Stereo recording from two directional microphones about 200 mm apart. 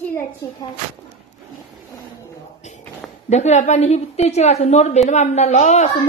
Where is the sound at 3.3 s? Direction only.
35° left (ahead or behind).